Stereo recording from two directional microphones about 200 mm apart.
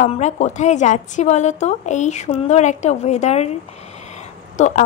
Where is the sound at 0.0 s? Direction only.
35° left (ahead or behind).